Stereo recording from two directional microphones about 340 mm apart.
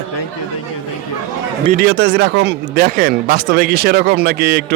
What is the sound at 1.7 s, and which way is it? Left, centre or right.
Speech, right.